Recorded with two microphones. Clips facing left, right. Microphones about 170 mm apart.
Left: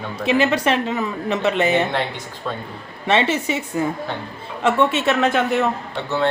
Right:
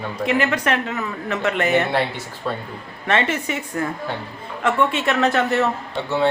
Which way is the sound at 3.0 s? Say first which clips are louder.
Left 2 dB; 25° left (ahead or behind).